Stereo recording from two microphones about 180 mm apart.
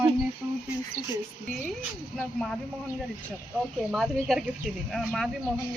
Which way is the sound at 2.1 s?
5° left (ahead or behind).